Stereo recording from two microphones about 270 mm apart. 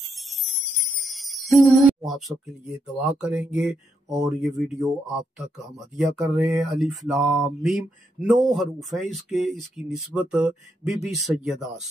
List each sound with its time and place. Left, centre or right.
1.0 s jingle bell: centre
3.0 s speech: centre
5.9 s speech: centre